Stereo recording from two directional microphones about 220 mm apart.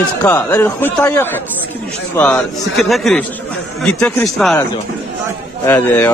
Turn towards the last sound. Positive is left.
turn(degrees=10)  # may be behind; listen again after turning